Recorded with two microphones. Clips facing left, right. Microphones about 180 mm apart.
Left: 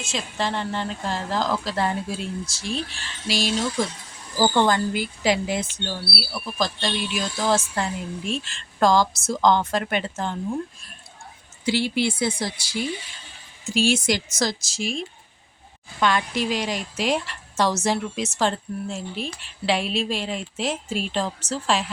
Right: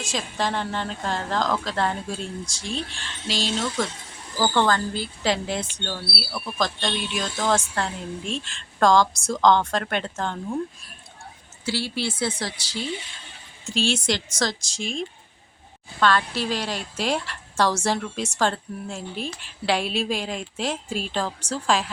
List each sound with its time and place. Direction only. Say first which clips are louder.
0.1 s a woman's voice: even; 5° left (ahead or behind)
11.6 s a woman's voice: left 5 dB; 15° left (ahead or behind)